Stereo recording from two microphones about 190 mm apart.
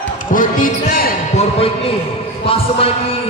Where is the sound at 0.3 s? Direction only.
45° left (ahead or behind).